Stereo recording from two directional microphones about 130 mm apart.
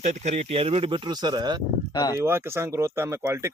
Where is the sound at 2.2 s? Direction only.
20° right (ahead or behind).